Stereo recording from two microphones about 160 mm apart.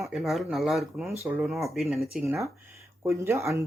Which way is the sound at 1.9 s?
Centre (ahead or behind).